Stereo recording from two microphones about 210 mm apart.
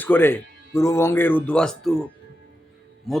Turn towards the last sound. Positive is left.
turn(degrees=0)  # may be behind; listen again after turning